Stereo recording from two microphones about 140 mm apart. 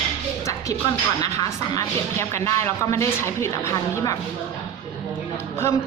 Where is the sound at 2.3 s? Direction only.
20° left (ahead or behind).